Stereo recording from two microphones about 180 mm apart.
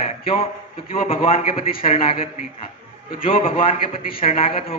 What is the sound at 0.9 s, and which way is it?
Speech, 30° left (ahead or behind).